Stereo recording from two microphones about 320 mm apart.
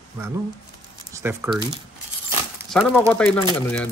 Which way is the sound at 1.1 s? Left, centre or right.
Centre.